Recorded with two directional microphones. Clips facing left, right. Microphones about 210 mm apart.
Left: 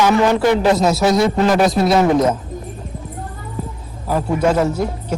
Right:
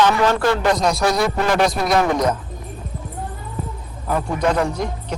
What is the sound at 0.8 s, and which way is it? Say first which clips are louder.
Speech: left 4 dB; 5° left (ahead or behind).